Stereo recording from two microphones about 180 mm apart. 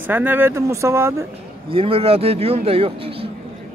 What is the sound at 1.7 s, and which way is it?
A man's voice, 30° right (ahead or behind).